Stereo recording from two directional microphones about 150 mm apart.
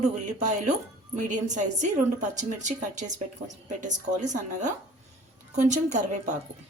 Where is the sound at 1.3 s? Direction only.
55° right (ahead or behind).